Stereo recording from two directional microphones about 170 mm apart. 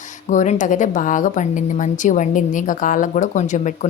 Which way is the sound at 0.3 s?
45° left (ahead or behind).